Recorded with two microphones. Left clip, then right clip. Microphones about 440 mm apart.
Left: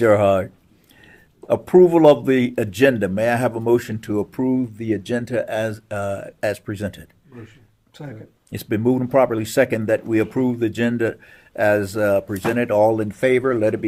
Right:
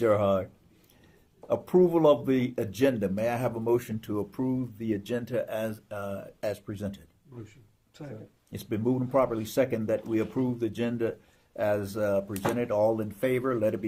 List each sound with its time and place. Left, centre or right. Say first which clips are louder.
0.0 s speech: left 9 dB; left
1.5 s speech: left 10 dB; left
8.5 s speech: left 9 dB; left